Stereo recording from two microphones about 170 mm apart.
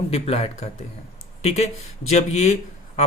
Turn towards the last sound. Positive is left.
turn(degrees=40)  # may be behind; listen again after turning